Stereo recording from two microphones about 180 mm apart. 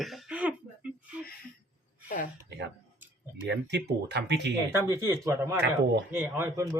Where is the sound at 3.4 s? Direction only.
75° right (ahead or behind).